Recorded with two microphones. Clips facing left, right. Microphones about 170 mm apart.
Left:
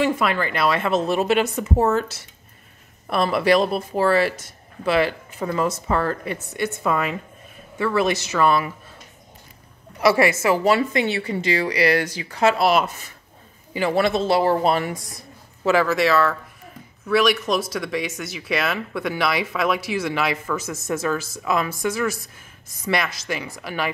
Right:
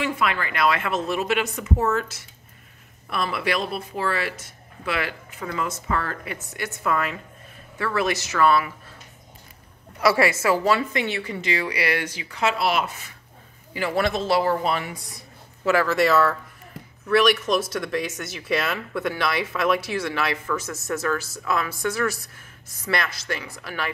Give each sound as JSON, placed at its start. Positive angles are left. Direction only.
{"t": 0.0, "sound": "speech", "side_deg": 35}
{"t": 10.0, "sound": "speech", "side_deg": 20}
{"t": 10.8, "sound": "speech", "side_deg": 35}
{"t": 13.7, "sound": "speech", "side_deg": 25}
{"t": 15.6, "sound": "speech", "side_deg": 15}
{"t": 16.0, "sound": "speech", "side_deg": 0}
{"t": 17.7, "sound": "speech", "side_deg": 0}
{"t": 23.2, "sound": "speech", "side_deg": 15}